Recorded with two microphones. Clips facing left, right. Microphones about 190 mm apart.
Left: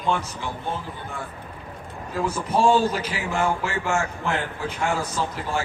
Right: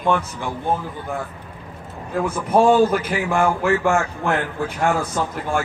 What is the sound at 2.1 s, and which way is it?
Speech, 55° right (ahead or behind).